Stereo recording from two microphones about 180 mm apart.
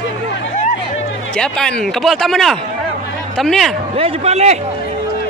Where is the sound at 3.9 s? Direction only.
35° right (ahead or behind).